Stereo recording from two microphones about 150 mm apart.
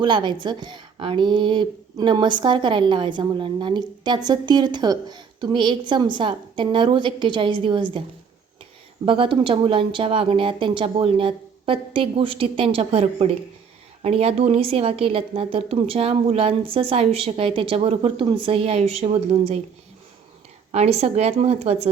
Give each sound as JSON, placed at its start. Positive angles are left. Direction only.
{"t": 0.0, "sound": "a woman's voice", "side_deg": -30}
{"t": 9.0, "sound": "a woman's voice", "side_deg": -35}
{"t": 20.7, "sound": "a woman's voice", "side_deg": -45}